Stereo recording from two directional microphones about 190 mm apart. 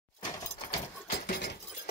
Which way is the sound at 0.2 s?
20° left (ahead or behind).